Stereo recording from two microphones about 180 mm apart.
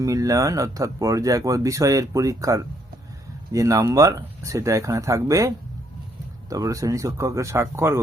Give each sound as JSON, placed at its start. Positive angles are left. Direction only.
{"t": 0.0, "sound": "speech", "side_deg": -20}